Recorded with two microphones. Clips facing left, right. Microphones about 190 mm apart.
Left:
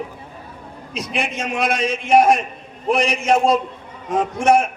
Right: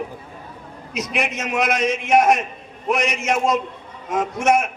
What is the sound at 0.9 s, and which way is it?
A man's voice, 30° left (ahead or behind).